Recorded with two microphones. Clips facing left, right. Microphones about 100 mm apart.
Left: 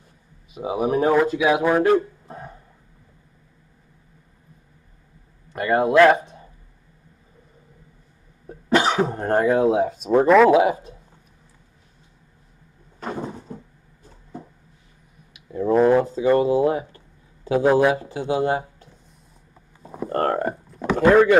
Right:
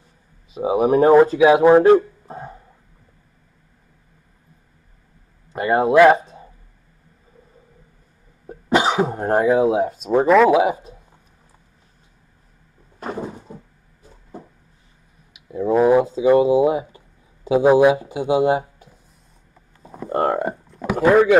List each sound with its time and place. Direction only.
0.6 s speech: 30° right (ahead or behind)
5.5 s speech: 20° right (ahead or behind)
8.5 s speech: 15° right (ahead or behind); by 10.5 s centre (ahead or behind)
10.5 s speech: 15° right (ahead or behind)
15.5 s speech: 5° right (ahead or behind)
19.8 s a sound: 5° left (ahead or behind)
20.1 s speech: 10° right (ahead or behind)
20.7 s a sound: 10° right (ahead or behind)